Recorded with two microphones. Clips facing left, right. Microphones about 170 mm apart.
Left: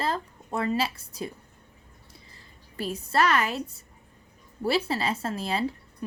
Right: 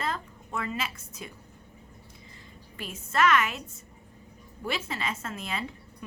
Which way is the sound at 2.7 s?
35° left (ahead or behind).